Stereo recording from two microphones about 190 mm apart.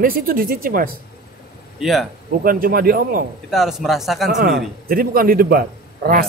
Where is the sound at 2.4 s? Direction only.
50° right (ahead or behind).